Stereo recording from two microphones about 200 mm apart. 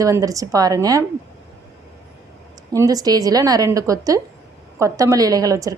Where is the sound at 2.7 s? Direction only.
15° right (ahead or behind).